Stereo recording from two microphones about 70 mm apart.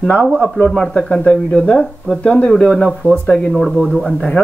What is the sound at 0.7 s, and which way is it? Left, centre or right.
Speech, centre.